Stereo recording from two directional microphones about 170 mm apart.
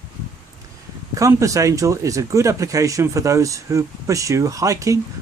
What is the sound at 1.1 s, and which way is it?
Speech, 20° right (ahead or behind).